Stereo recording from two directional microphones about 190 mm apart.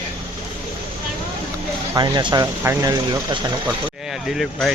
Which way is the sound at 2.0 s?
20° right (ahead or behind).